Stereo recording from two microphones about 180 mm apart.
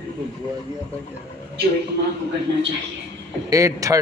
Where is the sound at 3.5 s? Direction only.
20° right (ahead or behind).